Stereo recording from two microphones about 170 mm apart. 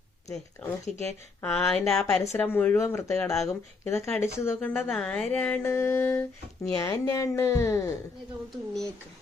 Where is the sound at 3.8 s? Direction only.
15° left (ahead or behind).